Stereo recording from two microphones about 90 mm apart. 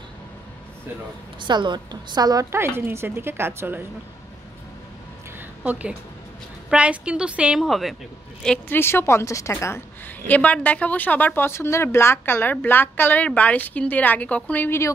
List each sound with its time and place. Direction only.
1.5 s a woman's voice: 55° right (ahead or behind)
2.5 s a woman's voice: 30° right (ahead or behind)
5.6 s a woman's voice: 15° right (ahead or behind)
7.6 s speech: centre (ahead or behind)
8.6 s a woman's voice: 25° left (ahead or behind)